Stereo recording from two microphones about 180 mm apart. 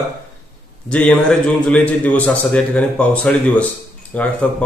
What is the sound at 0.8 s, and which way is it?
A man's voice, 5° left (ahead or behind).